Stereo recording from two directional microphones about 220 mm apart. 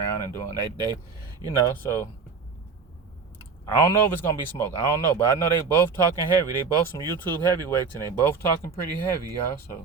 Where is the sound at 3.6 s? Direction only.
15° left (ahead or behind).